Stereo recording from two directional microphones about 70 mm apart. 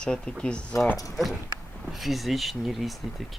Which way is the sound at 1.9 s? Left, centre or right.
Centre.